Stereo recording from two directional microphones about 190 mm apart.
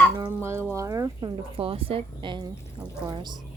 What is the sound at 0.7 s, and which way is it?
Speech, 15° right (ahead or behind).